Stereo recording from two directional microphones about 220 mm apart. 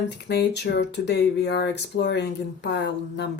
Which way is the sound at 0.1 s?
50° left (ahead or behind).